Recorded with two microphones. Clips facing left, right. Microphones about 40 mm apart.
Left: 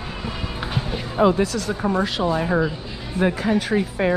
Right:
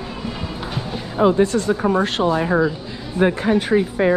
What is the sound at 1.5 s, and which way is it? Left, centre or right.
Speech, right.